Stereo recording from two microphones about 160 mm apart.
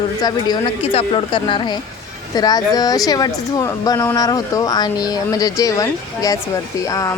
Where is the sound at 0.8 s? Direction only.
35° left (ahead or behind).